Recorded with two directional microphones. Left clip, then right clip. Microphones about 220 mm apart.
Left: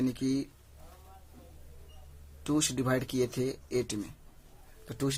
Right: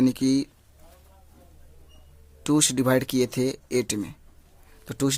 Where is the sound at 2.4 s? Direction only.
45° right (ahead or behind).